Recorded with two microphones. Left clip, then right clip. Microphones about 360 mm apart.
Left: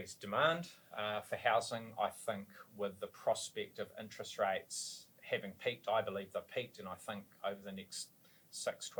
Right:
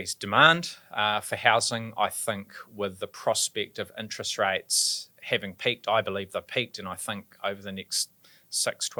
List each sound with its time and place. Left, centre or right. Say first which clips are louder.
0.0 s speech: right 14 dB; right